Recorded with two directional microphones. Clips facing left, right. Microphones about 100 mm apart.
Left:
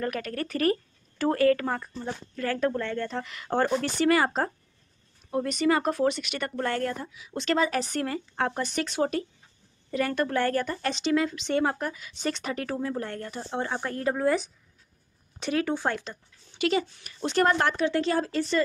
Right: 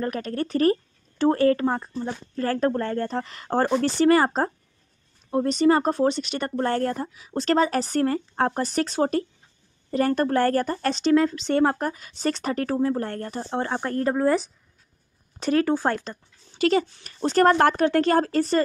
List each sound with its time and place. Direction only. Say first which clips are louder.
0.0 s speech: right 3 dB; 30° right (ahead or behind)
2.3 s speech: right 4 dB; 35° right (ahead or behind)